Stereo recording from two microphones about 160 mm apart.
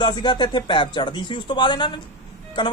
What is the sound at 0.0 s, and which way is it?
A man's voice, 30° left (ahead or behind).